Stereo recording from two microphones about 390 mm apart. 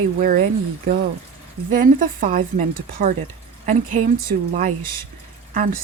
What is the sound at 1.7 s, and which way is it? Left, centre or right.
Speech, centre.